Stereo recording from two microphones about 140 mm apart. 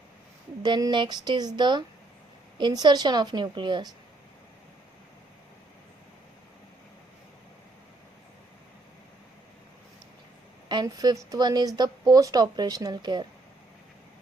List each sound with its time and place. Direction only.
0.6 s a woman's voice: 35° right (ahead or behind)
10.7 s a woman's voice: 30° right (ahead or behind)